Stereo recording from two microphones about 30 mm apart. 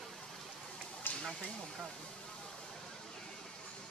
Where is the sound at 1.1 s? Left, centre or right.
Left.